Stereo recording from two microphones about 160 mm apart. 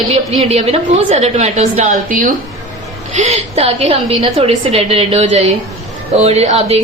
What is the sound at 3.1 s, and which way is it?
A woman's voice, 45° right (ahead or behind).